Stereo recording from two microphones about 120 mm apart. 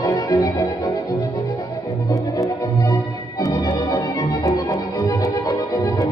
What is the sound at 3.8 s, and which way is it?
Music, 30° left (ahead or behind).